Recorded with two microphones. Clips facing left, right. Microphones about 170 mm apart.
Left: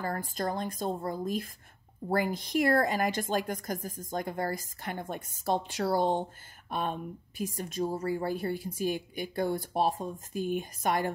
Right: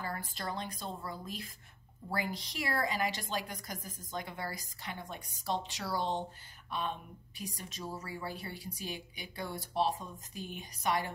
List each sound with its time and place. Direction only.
0.0 s speech: 45° left (ahead or behind)